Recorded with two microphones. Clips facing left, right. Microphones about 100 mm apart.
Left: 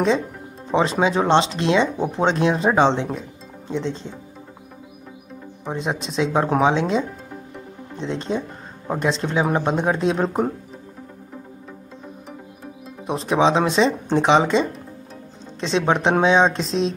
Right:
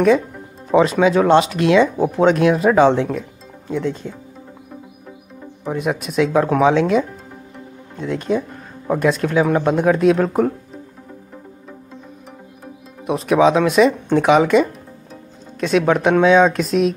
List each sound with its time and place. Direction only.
0.7 s speech: 25° left (ahead or behind)
5.7 s speech: 25° left (ahead or behind)
13.0 s speech: 30° left (ahead or behind)
15.9 s speech: 25° left (ahead or behind)